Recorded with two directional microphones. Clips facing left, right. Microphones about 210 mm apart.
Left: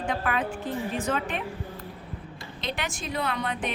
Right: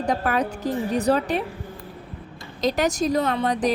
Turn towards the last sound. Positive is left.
turn(degrees=-35)  # may be behind; listen again after turning